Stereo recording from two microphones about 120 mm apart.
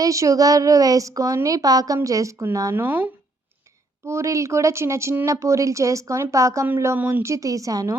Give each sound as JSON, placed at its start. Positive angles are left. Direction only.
{"t": 0.0, "sound": "speech", "side_deg": -25}
{"t": 2.8, "sound": "speech", "side_deg": -15}